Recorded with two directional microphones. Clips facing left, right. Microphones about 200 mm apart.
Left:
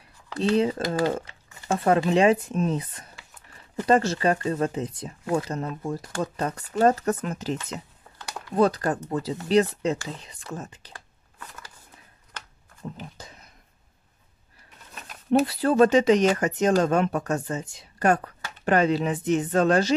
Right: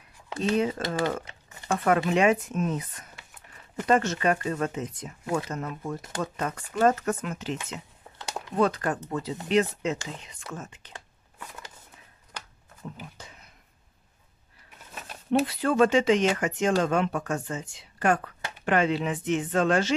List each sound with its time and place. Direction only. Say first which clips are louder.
0.4 s speech: left 3 dB; 30° left (ahead or behind)
1.9 s speech: left 3 dB; 30° left (ahead or behind)
8.5 s speech: left 3 dB; 35° left (ahead or behind)
10.9 s a sound: right 1 dB; 20° right (ahead or behind)
12.3 s shuffling cards: right 1 dB; 10° right (ahead or behind)
15.4 s speech: left 3 dB; 35° left (ahead or behind)